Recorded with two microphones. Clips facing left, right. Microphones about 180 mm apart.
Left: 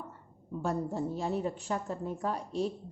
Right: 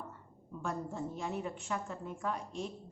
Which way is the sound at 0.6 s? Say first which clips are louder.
Left 6 dB; 35° left (ahead or behind).